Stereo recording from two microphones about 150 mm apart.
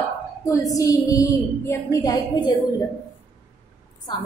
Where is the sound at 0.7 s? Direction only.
20° left (ahead or behind).